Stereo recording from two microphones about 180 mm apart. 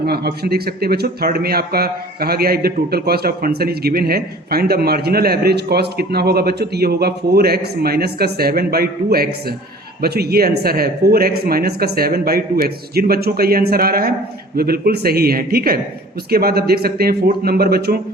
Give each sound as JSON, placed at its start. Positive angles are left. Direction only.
{"t": 0.0, "sound": "speech", "side_deg": -60}